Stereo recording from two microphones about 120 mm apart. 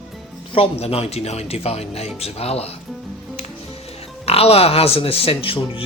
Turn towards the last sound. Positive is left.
turn(degrees=50)  # may be behind; listen again after turning